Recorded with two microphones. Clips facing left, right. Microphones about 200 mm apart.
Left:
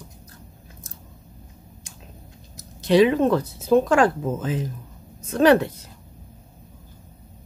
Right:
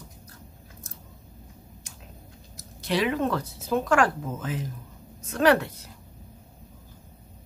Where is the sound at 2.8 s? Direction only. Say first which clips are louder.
Left 9 dB; 20° left (ahead or behind).